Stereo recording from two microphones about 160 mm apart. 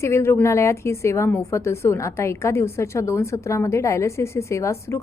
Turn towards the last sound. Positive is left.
turn(degrees=20)  # may be behind; listen again after turning